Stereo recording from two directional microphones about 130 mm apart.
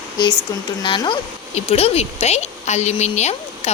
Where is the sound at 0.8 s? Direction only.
40° left (ahead or behind).